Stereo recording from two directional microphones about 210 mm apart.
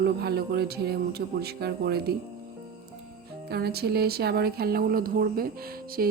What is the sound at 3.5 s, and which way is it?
Speech, 50° right (ahead or behind).